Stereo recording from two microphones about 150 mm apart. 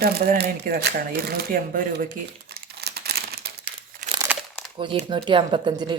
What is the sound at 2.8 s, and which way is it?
Crumpling, 90° right.